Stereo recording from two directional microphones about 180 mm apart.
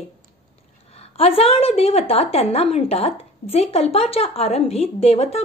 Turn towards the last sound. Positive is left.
turn(degrees=35)  # may be behind; listen again after turning